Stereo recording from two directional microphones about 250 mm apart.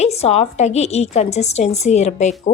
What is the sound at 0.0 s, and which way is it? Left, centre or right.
A woman's voice, left.